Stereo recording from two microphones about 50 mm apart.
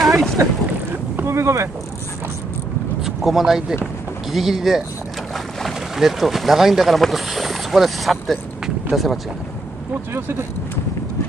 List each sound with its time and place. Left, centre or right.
0.0 s boat: centre
1.2 s boat: right
3.0 s speech: centre
5.9 s speech: centre
10.1 s speech: right